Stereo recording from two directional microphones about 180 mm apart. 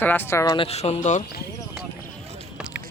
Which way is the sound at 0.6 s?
35° left (ahead or behind).